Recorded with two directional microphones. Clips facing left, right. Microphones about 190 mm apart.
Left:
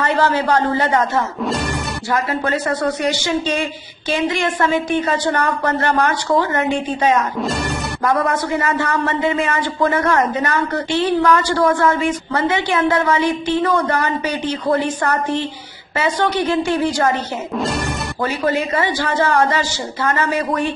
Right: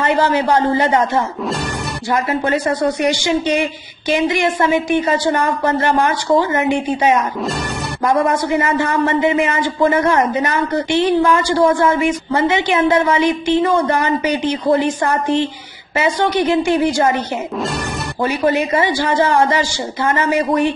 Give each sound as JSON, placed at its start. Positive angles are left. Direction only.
{"t": 0.0, "sound": "a woman's voice", "side_deg": -10}
{"t": 2.5, "sound": "a woman's voice", "side_deg": -15}
{"t": 8.1, "sound": "a woman's voice", "side_deg": -20}
{"t": 16.0, "sound": "a woman's voice", "side_deg": -10}
{"t": 18.2, "sound": "a woman's voice", "side_deg": -20}
{"t": 20.1, "sound": "a woman's voice", "side_deg": -20}